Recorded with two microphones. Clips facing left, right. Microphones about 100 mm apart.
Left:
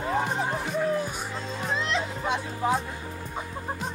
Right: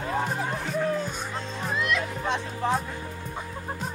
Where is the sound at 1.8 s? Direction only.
30° left (ahead or behind).